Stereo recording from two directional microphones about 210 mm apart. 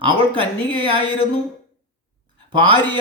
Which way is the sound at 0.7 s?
20° right (ahead or behind).